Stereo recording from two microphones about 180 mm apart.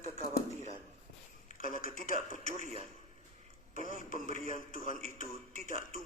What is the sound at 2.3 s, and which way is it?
Speech, 40° right (ahead or behind).